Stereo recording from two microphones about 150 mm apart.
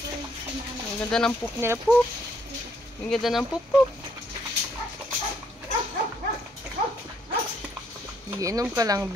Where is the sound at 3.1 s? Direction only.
Centre (ahead or behind).